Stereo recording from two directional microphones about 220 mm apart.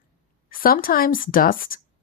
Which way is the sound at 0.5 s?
40° left (ahead or behind).